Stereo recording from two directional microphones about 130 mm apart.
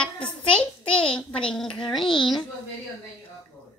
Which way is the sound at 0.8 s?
45° left (ahead or behind).